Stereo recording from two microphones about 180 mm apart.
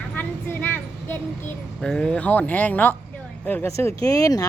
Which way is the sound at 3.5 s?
15° left (ahead or behind).